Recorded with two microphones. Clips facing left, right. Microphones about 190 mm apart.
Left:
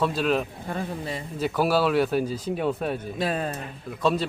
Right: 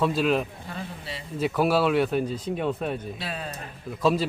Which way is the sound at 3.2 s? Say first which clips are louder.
Left 8 dB; 45° left (ahead or behind).